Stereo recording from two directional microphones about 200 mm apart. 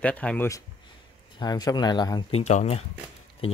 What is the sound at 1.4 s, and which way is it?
Speech, 20° left (ahead or behind).